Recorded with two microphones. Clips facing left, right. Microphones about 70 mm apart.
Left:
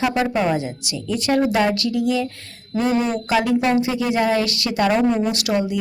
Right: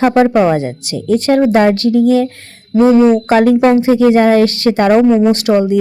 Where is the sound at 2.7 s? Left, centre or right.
Right.